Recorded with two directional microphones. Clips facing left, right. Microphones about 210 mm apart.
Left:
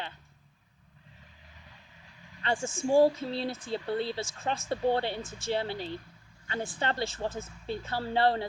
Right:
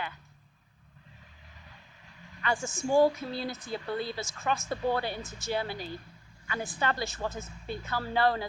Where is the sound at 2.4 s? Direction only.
30° left (ahead or behind).